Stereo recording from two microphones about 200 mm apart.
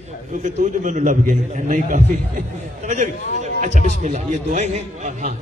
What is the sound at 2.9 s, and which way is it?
A man's voice, 35° right (ahead or behind).